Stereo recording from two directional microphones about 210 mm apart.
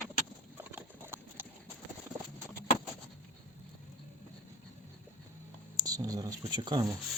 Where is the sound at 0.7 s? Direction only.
10° right (ahead or behind).